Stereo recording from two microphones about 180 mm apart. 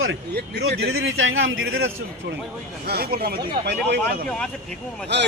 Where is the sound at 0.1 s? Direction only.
70° right (ahead or behind); by 1.9 s 90° right.